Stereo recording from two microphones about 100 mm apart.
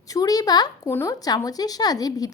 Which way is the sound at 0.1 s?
35° left (ahead or behind).